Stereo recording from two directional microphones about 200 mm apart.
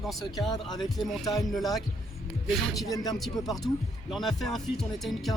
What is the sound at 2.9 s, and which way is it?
Music, 20° left (ahead or behind).